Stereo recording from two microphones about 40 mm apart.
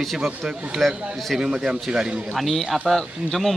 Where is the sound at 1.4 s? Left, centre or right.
Centre.